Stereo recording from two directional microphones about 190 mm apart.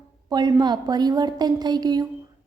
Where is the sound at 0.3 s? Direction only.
20° right (ahead or behind).